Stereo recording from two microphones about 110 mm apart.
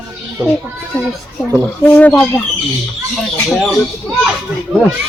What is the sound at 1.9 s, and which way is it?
Speech, 15° left (ahead or behind).